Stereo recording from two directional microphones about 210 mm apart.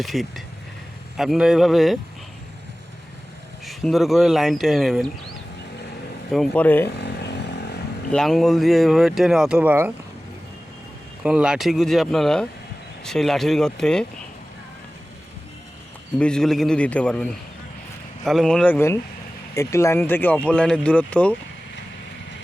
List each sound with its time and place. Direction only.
0.0 s speech: centre (ahead or behind)
3.7 s speech: centre (ahead or behind)
6.3 s speech: 5° left (ahead or behind)
6.9 s vehicle: 55° left (ahead or behind)
8.1 s speech: centre (ahead or behind)
11.2 s speech: 5° right (ahead or behind)
16.1 s speech: 5° left (ahead or behind)